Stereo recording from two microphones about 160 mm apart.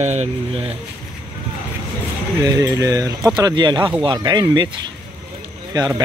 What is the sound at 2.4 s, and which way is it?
Speech, 20° right (ahead or behind).